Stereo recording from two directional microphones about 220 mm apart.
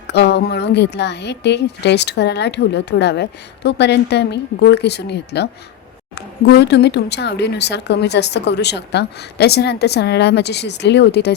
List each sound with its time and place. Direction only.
0.1 s speech: 50° left (ahead or behind)